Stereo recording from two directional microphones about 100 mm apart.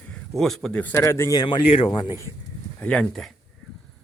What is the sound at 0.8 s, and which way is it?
Speech, 15° left (ahead or behind).